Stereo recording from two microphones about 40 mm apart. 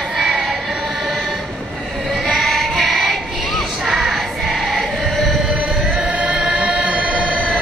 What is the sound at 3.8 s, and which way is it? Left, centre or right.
Choir, centre.